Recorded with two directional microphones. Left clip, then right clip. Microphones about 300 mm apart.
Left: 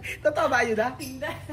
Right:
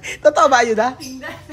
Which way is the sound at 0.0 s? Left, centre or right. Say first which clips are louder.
Right 11 dB; centre.